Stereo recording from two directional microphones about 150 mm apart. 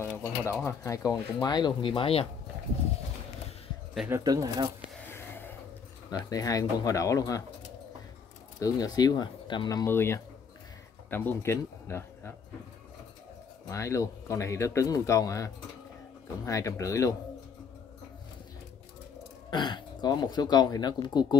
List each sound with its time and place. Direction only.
0.0 s speech: 15° left (ahead or behind); by 2.2 s 40° left (ahead or behind)
4.1 s speech: 25° right (ahead or behind)
5.1 s gasp: 15° left (ahead or behind)
6.0 s speech: 25° left (ahead or behind)
8.5 s speech: 25° left (ahead or behind)
9.8 s speech: 15° left (ahead or behind)
13.7 s speech: 20° left (ahead or behind)
19.5 s speech: 30° left (ahead or behind)